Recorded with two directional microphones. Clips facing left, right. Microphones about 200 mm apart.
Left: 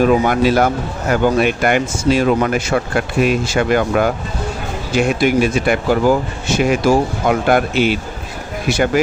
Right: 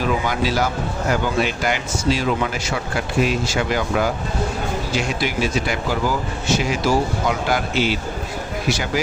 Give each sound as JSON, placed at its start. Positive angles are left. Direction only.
{"t": 0.0, "sound": "speech", "side_deg": 55}